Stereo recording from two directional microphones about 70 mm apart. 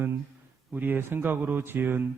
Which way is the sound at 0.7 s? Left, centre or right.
Right.